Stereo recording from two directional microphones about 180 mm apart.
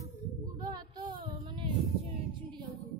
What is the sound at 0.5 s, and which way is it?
Speech, 25° right (ahead or behind).